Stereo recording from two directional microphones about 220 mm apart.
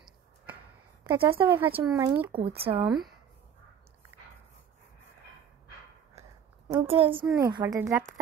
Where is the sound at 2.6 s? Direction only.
25° right (ahead or behind).